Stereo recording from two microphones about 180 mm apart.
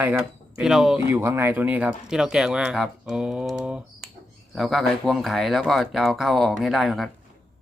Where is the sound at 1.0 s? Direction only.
15° right (ahead or behind).